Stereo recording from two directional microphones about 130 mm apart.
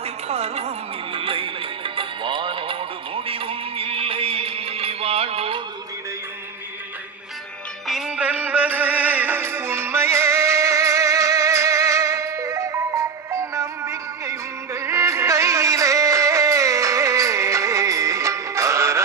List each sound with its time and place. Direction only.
0.0 s music: 55° right (ahead or behind)
1.1 s music: 45° right (ahead or behind)
7.9 s music: 5° right (ahead or behind); by 19.0 s 20° right (ahead or behind)